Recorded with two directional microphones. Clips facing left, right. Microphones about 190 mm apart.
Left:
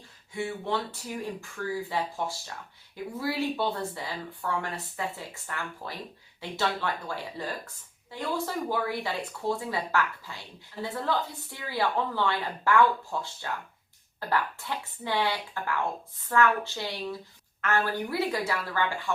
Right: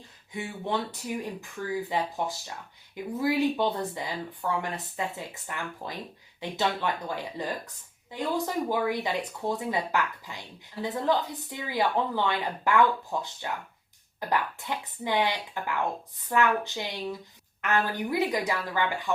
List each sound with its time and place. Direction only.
0.3 s speech: 15° right (ahead or behind)